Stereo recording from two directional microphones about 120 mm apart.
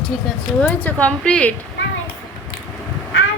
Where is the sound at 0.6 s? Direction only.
15° left (ahead or behind).